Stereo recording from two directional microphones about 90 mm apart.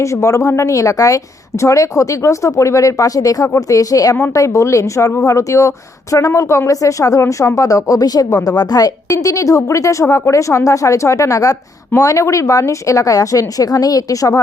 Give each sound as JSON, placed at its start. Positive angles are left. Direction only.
{"t": 0.0, "sound": "a woman's voice", "side_deg": 35}